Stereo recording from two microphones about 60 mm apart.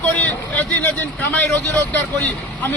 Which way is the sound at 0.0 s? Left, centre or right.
Left.